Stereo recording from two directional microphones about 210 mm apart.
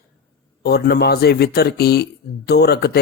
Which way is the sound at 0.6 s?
50° left (ahead or behind).